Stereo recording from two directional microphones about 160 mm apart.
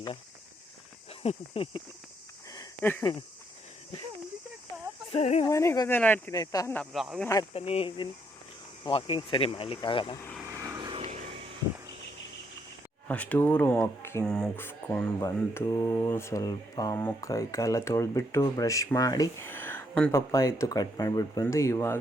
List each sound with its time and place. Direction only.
1.2 s speech: 40° left (ahead or behind)
3.0 s speech: 25° left (ahead or behind)
5.1 s speech: 40° left (ahead or behind)
5.5 s speech: 20° left (ahead or behind)
6.3 s speech: 25° left (ahead or behind)
6.7 s speech: centre (ahead or behind)
7.5 s speech: 40° left (ahead or behind)
10.4 s vehicle: 20° right (ahead or behind)
11.0 s vehicle: 45° right (ahead or behind)
13.1 s speech: 10° left (ahead or behind)
14.3 s speech: 5° left (ahead or behind)